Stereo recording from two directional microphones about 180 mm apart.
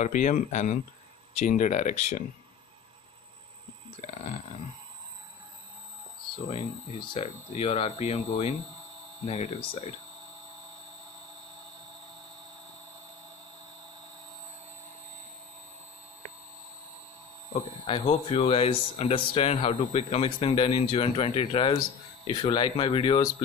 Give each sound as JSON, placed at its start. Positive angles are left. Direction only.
{"t": 0.0, "sound": "speech", "side_deg": 45}
{"t": 4.0, "sound": "speech", "side_deg": 35}
{"t": 7.2, "sound": "speech", "side_deg": 35}
{"t": 17.8, "sound": "speech", "side_deg": 30}